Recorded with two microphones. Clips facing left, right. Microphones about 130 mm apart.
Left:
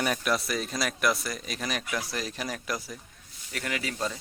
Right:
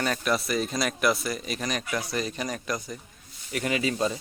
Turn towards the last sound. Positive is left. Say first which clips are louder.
# right 6 dB
turn(degrees=-20)  # may be behind; listen again after turning